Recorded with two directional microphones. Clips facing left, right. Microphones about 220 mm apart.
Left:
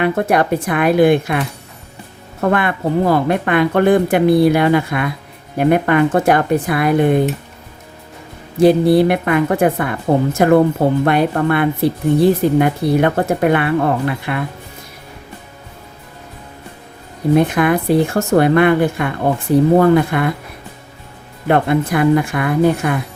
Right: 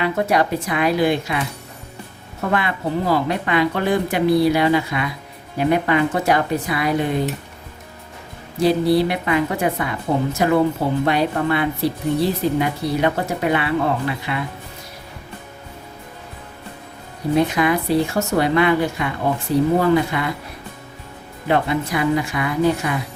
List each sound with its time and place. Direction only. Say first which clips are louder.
0.0 s speech: left 4 dB; 55° left (ahead or behind)
8.5 s speech: left 6 dB; 55° left (ahead or behind)
17.3 s speech: left 4 dB; 55° left (ahead or behind)
21.4 s speech: left 5 dB; 55° left (ahead or behind)